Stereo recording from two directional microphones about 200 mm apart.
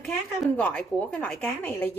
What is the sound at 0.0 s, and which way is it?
A woman's voice, 5° left (ahead or behind).